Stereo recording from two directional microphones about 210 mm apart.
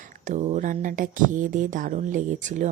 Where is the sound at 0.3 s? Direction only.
35° right (ahead or behind).